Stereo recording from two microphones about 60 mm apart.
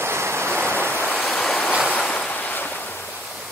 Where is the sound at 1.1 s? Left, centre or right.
Centre; by 2.6 s left.